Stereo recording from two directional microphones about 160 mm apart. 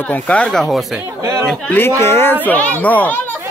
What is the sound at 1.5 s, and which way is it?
Speech, 10° left (ahead or behind).